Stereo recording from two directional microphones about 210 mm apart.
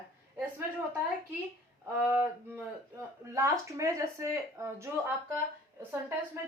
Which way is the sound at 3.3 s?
15° right (ahead or behind).